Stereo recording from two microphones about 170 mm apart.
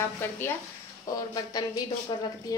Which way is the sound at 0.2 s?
10° left (ahead or behind).